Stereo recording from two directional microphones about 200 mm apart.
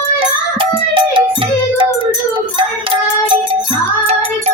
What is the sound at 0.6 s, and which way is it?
Music, 25° right (ahead or behind).